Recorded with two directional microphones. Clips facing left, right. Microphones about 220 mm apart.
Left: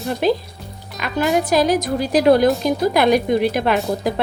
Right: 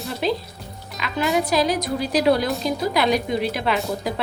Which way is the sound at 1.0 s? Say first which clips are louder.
Left 4 dB; 50° left (ahead or behind).